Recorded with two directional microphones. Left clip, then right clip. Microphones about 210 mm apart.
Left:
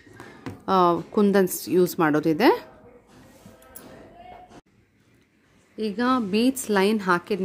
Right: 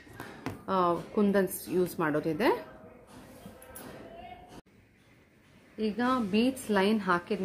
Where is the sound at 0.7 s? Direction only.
55° left (ahead or behind).